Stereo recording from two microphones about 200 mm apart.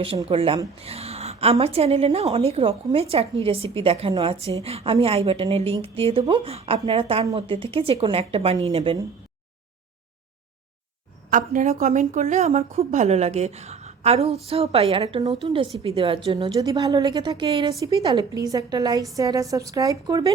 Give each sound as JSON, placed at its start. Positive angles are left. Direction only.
{"t": 0.3, "sound": "a woman's voice", "side_deg": -30}
{"t": 11.3, "sound": "a woman's voice", "side_deg": -40}